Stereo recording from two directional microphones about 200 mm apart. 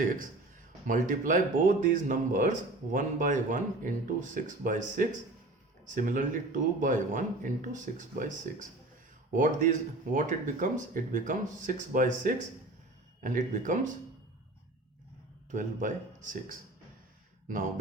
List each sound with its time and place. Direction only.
0.9 s speech: 40° right (ahead or behind)
15.5 s speech: 40° right (ahead or behind)